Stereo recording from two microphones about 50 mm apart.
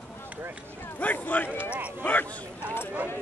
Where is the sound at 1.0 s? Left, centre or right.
Left.